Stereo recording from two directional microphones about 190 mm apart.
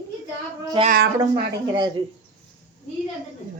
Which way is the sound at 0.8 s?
25° right (ahead or behind).